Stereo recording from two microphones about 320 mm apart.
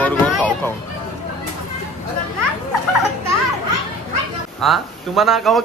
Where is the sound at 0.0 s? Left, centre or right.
Centre.